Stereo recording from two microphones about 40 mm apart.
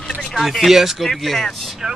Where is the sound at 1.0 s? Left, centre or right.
Centre.